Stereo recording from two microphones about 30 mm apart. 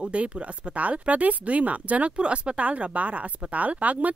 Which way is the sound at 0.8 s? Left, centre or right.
Right.